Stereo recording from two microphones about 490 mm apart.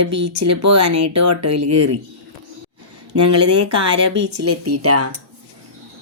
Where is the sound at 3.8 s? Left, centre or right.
Right.